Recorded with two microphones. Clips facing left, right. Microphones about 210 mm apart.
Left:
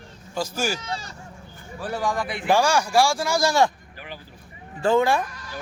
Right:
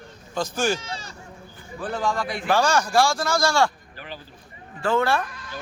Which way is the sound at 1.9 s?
15° left (ahead or behind).